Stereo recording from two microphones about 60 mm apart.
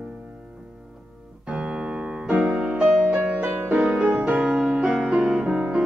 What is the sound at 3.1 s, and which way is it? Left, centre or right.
Music, centre.